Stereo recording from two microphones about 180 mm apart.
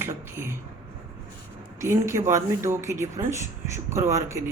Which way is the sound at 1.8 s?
15° right (ahead or behind).